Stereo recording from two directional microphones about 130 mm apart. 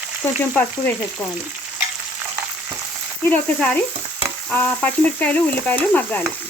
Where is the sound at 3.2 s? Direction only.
10° left (ahead or behind).